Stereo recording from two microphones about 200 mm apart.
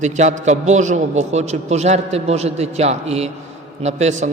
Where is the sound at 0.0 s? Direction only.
35° right (ahead or behind).